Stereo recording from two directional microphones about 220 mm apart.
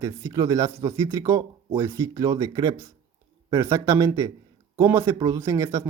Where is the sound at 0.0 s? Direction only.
15° right (ahead or behind).